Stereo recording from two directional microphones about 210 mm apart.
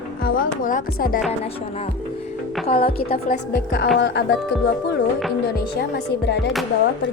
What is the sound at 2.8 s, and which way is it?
Speech, 45° left (ahead or behind).